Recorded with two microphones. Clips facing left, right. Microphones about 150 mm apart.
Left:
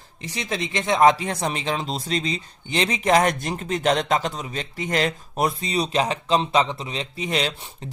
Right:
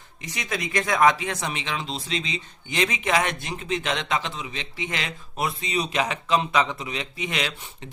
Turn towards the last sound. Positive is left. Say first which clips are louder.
# left 4 dB
turn(degrees=35)  # may be behind; listen again after turning